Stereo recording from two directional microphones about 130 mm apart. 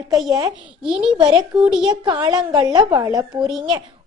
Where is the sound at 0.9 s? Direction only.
5° right (ahead or behind).